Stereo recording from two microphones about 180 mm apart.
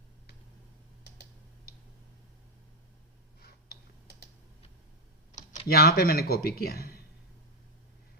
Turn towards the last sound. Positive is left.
turn(degrees=60)  # may be behind; listen again after turning